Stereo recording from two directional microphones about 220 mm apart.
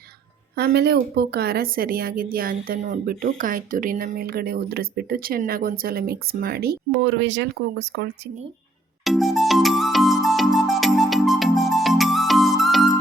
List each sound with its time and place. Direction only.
0.5 s a woman's voice: 45° right (ahead or behind)
9.0 s music: centre (ahead or behind)